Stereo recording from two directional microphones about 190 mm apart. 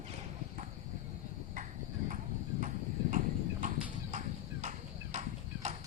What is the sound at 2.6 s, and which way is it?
Clip-clop, 45° right (ahead or behind).